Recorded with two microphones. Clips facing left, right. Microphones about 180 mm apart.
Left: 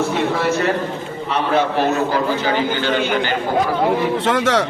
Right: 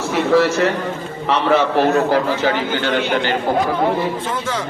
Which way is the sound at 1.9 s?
60° right (ahead or behind).